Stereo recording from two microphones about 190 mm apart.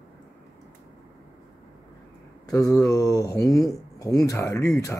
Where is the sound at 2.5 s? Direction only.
15° left (ahead or behind).